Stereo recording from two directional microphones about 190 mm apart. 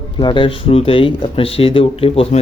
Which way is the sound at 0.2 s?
25° left (ahead or behind).